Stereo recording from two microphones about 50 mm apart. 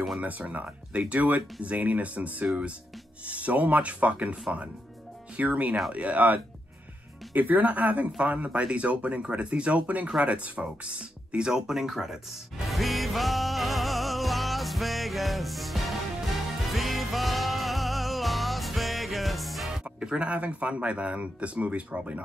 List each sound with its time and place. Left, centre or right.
0.2 s speech: right
10.2 s music: right; by 19.7 s centre
19.8 s speech: centre